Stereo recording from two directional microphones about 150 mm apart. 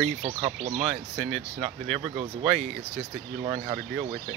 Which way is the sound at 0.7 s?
40° right (ahead or behind).